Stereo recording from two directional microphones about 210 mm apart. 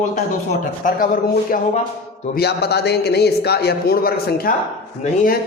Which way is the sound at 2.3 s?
50° left (ahead or behind).